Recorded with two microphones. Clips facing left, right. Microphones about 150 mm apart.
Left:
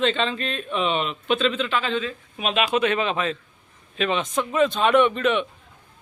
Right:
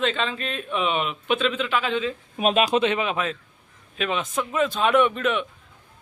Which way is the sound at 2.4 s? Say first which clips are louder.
Right 2 dB; 40° right (ahead or behind).